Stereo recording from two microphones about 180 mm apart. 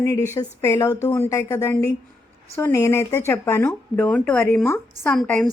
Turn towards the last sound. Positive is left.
turn(degrees=5)  # may be behind; listen again after turning